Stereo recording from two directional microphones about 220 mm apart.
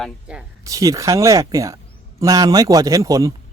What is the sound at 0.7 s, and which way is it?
Speech, 15° right (ahead or behind).